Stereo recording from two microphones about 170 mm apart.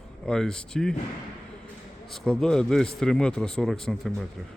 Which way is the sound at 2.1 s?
5° left (ahead or behind).